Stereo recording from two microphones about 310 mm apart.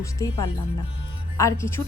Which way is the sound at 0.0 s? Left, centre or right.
Centre.